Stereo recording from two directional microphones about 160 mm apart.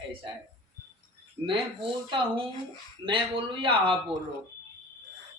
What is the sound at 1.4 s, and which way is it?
A woman's voice, 35° right (ahead or behind).